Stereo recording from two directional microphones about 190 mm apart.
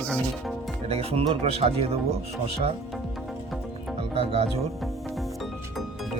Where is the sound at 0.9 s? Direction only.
30° right (ahead or behind).